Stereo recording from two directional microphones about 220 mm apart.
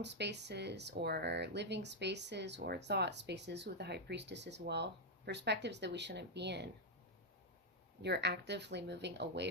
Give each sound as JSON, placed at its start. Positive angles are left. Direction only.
{"t": 0.0, "sound": "speech", "side_deg": -50}
{"t": 8.0, "sound": "speech", "side_deg": -50}